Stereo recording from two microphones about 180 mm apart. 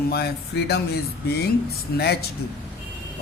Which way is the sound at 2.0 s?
60° left (ahead or behind).